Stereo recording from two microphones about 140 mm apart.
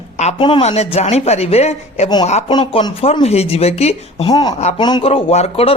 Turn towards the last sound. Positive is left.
turn(degrees=45)  # may be behind; listen again after turning